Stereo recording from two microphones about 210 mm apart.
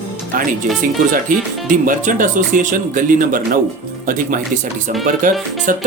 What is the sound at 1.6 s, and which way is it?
Speech, 40° right (ahead or behind).